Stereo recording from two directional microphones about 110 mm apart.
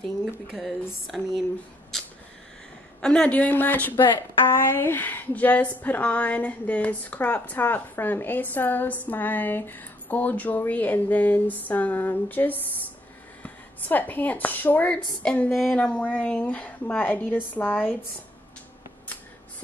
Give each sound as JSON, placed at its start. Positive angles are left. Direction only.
{"t": 0.6, "sound": "speech", "side_deg": 0}
{"t": 3.0, "sound": "a woman's voice", "side_deg": 10}